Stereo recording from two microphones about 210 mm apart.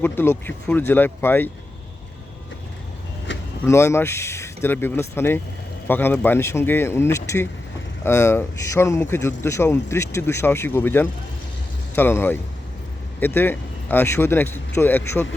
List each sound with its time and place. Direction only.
0.0 s speech: 10° left (ahead or behind)
3.7 s speech: 15° left (ahead or behind)